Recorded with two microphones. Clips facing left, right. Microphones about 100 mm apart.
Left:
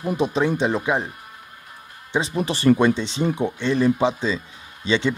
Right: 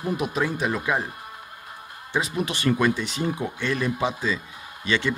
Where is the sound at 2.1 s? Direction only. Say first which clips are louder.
Left 3 dB; 30° left (ahead or behind).